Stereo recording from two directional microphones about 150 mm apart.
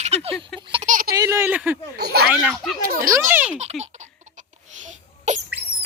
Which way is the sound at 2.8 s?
75° right (ahead or behind).